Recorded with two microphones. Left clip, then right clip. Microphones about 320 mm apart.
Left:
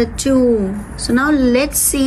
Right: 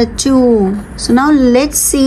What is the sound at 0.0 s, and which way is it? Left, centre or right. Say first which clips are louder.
A woman's voice: right 3 dB; centre.